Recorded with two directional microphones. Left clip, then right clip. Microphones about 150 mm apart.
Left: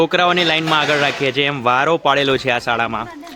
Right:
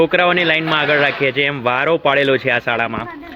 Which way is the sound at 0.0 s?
30° left (ahead or behind).